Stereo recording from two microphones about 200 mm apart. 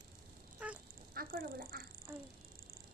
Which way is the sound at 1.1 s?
45° right (ahead or behind).